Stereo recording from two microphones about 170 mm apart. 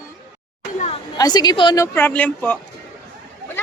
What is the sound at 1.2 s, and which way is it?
Speech, 25° left (ahead or behind).